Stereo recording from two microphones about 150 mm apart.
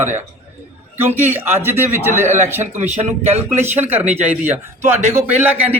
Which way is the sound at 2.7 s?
45° right (ahead or behind).